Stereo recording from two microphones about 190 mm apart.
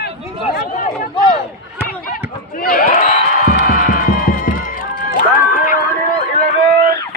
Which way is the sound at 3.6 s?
45° left (ahead or behind).